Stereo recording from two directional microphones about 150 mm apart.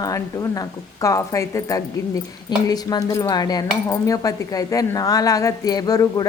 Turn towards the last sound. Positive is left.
turn(degrees=25)  # may be behind; listen again after turning